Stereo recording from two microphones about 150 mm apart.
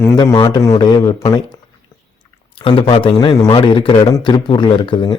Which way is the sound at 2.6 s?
35° left (ahead or behind).